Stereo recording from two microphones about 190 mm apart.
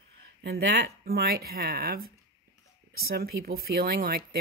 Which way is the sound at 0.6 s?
55° right (ahead or behind).